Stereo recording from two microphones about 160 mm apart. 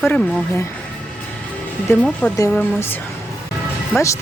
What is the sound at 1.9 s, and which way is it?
Speech, 5° left (ahead or behind).